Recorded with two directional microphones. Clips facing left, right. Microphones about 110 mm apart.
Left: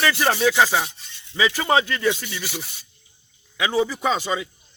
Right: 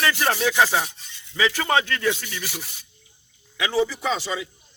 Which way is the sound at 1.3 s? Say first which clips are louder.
Left 2 dB; 15° left (ahead or behind).